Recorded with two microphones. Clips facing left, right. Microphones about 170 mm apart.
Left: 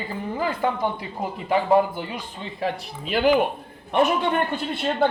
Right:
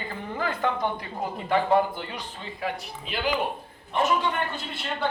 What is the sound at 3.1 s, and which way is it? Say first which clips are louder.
A man's voice: left 8 dB; 50° left (ahead or behind).